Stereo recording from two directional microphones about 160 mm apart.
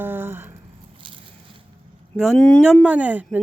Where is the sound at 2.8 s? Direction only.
10° right (ahead or behind).